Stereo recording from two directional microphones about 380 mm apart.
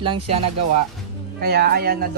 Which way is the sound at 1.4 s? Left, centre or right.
Right.